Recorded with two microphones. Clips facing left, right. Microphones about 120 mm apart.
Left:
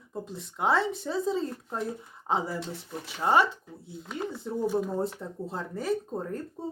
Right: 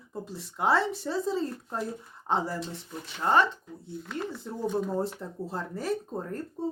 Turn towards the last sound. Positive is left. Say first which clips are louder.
# even
turn(degrees=0)  # may be behind; listen again after turning